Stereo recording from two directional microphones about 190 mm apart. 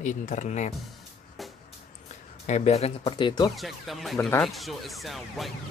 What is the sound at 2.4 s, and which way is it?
Speech, 35° left (ahead or behind).